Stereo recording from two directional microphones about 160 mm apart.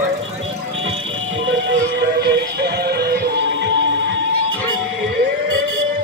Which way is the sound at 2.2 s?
90° right.